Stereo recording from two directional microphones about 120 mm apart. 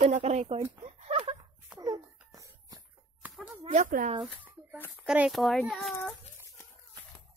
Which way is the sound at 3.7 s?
90° right.